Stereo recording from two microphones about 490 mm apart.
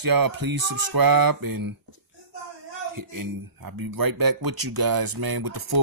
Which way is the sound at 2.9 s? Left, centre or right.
Right.